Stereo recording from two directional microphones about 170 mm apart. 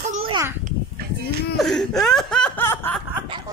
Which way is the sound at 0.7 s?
65° right (ahead or behind).